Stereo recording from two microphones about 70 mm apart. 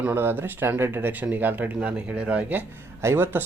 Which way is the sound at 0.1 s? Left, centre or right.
Right.